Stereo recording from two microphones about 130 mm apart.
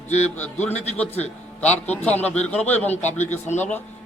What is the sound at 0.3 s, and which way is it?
Speech, 15° left (ahead or behind).